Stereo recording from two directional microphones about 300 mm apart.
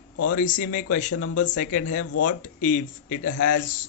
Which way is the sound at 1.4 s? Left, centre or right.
Left.